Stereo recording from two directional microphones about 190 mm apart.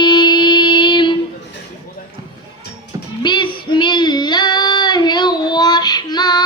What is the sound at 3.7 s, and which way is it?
Child singing, 25° left (ahead or behind).